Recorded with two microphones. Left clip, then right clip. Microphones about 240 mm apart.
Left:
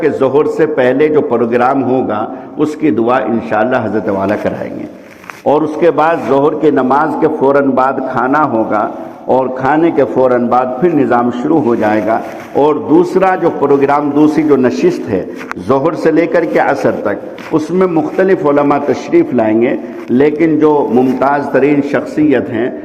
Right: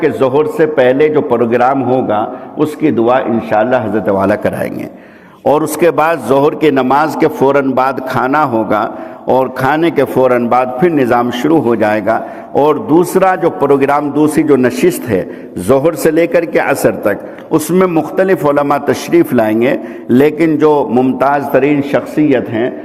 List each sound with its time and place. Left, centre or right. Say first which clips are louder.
0.0 s a man's voice: even; right